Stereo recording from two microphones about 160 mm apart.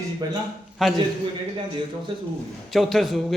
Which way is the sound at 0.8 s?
Centre (ahead or behind).